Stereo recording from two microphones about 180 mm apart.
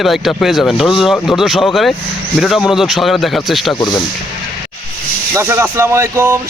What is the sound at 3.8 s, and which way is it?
Speech, 20° left (ahead or behind).